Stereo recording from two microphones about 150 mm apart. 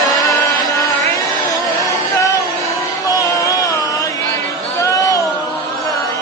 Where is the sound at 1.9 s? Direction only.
25° left (ahead or behind).